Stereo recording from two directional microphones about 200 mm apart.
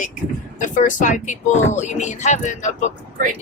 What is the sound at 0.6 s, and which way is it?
Speech, 40° left (ahead or behind).